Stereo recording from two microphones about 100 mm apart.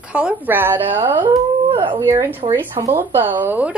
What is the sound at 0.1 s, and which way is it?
Speech, 10° right (ahead or behind).